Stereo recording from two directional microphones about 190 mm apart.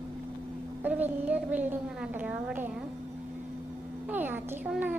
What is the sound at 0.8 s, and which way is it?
A woman's voice, 10° right (ahead or behind).